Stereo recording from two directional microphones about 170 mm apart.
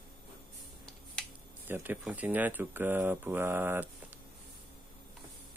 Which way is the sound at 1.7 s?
10° right (ahead or behind).